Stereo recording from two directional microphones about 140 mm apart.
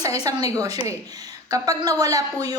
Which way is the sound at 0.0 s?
25° right (ahead or behind).